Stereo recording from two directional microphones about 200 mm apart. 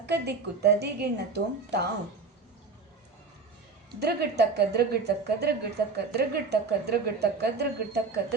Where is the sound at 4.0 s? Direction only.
55° right (ahead or behind).